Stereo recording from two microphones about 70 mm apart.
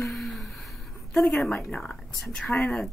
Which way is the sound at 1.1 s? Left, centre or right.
Centre.